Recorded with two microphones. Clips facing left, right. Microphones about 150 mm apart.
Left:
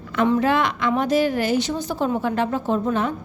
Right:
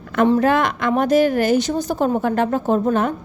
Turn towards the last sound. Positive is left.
turn(degrees=-50)  # may be behind; listen again after turning